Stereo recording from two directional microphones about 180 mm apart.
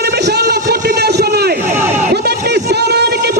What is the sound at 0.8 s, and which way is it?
Vehicle, 65° right (ahead or behind).